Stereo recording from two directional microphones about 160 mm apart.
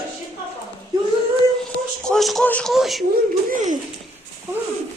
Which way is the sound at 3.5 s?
50° right (ahead or behind).